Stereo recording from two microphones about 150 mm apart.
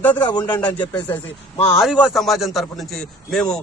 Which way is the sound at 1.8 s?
5° right (ahead or behind).